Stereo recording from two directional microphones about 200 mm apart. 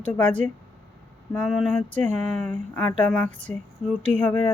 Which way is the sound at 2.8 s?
5° left (ahead or behind).